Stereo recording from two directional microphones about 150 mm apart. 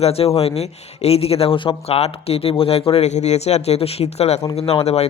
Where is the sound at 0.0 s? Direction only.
40° left (ahead or behind).